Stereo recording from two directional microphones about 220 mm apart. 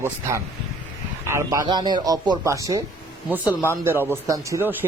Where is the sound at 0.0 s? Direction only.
10° right (ahead or behind).